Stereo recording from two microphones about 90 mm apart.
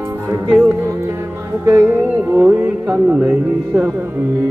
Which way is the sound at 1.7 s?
25° right (ahead or behind).